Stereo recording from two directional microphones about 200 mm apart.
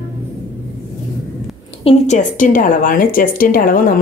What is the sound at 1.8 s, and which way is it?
A woman's voice, 30° left (ahead or behind).